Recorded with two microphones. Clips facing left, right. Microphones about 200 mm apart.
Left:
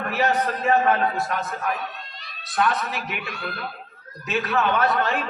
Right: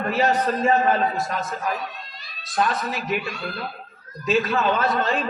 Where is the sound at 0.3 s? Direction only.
60° left (ahead or behind).